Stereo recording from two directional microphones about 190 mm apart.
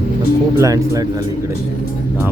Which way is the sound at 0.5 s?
15° right (ahead or behind).